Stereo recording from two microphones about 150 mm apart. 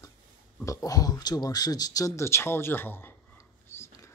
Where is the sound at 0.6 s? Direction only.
20° left (ahead or behind).